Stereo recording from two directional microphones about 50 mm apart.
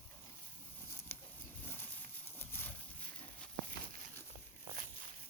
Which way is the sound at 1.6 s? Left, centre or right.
Left.